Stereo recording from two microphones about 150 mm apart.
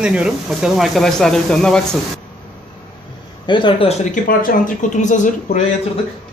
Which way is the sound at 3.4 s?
30° left (ahead or behind).